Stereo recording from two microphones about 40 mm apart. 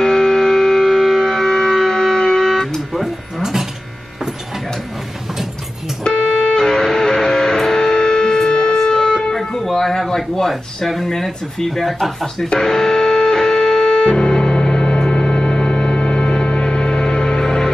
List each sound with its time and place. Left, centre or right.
0.0 s music: centre
2.9 s music: centre
6.0 s music: left
6.5 s music: centre
10.8 s speech: centre
12.5 s music: centre
14.1 s music: centre